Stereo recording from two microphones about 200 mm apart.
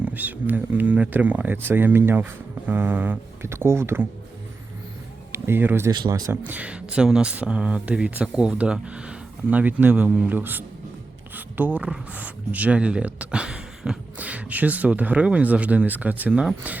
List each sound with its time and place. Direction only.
0.0 s speech: 10° right (ahead or behind)
5.3 s speech: 10° right (ahead or behind)